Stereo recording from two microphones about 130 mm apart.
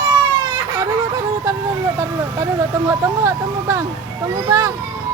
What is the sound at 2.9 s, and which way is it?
Speech, 25° right (ahead or behind).